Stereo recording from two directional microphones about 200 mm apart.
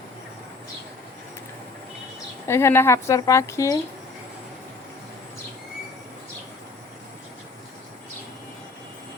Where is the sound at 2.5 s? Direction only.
10° left (ahead or behind).